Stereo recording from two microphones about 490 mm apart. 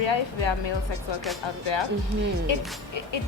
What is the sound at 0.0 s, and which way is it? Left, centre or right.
Speech, left.